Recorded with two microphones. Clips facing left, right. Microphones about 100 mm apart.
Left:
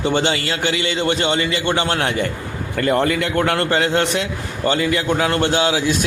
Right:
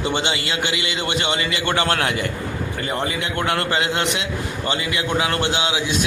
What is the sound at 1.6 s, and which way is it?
Speech, 20° left (ahead or behind).